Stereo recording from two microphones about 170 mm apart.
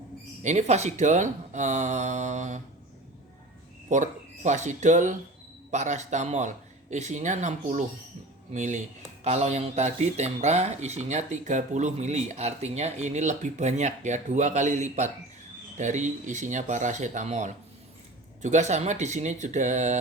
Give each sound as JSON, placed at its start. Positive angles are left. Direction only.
{"t": 0.4, "sound": "speech", "side_deg": -40}
{"t": 3.8, "sound": "speech", "side_deg": -45}